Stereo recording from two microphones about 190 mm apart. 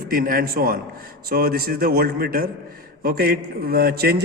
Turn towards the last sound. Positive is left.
turn(degrees=-55)  # may be behind; listen again after turning